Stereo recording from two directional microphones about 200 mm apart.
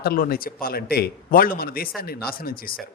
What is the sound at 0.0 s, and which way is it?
A man's voice, 50° left (ahead or behind).